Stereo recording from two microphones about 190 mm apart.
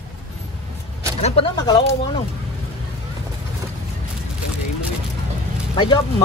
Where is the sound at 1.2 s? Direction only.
35° left (ahead or behind).